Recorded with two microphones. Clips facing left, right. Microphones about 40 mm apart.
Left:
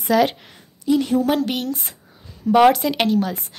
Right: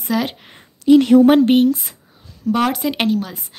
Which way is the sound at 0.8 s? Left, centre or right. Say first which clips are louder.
Right 8 dB; right.